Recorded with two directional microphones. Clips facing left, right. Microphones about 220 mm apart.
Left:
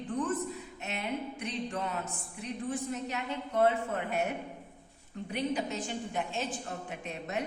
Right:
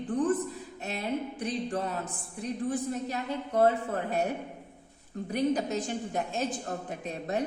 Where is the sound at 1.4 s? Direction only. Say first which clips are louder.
Right 4 dB; 35° right (ahead or behind).